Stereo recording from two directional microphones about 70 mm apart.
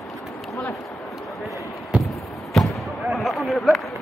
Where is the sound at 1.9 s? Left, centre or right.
Centre.